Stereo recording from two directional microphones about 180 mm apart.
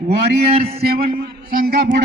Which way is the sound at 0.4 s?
35° right (ahead or behind).